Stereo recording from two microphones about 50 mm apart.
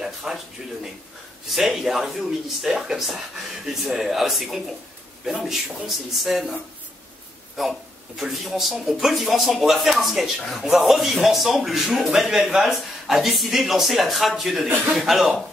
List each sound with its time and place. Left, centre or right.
0.0 s a sound: centre
1.5 s speech: centre
7.6 s speech: centre